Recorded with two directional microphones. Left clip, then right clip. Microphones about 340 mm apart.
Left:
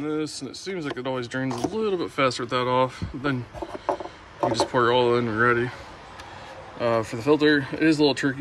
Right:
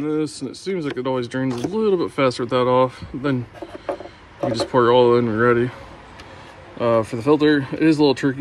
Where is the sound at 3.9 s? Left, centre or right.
Centre.